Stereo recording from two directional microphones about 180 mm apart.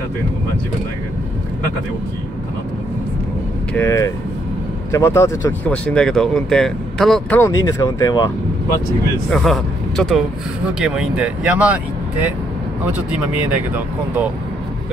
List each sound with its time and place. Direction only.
3.7 s speech: 15° left (ahead or behind)
5.7 s speech: 5° left (ahead or behind); by 8.3 s 20° left (ahead or behind)
9.3 s speech: centre (ahead or behind)